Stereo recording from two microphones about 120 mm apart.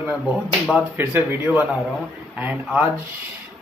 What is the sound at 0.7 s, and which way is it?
A man's voice, 15° right (ahead or behind).